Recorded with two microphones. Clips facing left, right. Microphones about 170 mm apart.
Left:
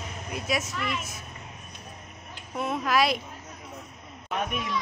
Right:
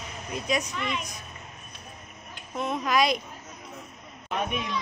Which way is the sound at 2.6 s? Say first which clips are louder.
Even; 5° left (ahead or behind).